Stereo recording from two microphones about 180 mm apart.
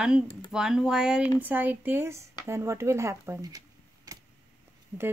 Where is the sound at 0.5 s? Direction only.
5° right (ahead or behind).